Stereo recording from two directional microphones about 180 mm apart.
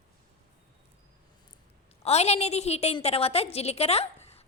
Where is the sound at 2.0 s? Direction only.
35° left (ahead or behind).